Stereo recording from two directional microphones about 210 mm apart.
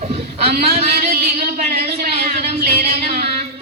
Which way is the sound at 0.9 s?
45° right (ahead or behind).